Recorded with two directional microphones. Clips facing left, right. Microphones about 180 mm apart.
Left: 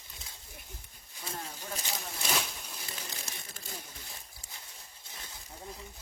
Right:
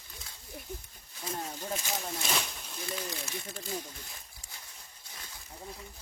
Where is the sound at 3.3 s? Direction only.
35° right (ahead or behind).